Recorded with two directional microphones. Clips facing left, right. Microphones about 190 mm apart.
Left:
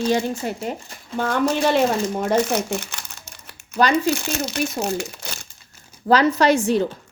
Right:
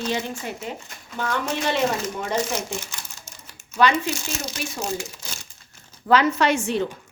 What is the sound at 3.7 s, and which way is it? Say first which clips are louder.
Speech: left 2 dB; 40° left (ahead or behind).